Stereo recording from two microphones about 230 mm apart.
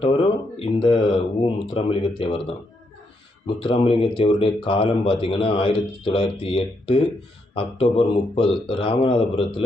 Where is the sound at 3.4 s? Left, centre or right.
Left.